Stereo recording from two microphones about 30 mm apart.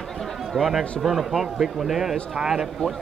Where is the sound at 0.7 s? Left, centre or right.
Centre.